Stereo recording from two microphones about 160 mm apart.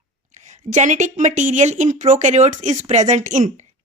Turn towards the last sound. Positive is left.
turn(degrees=-50)  # may be behind; listen again after turning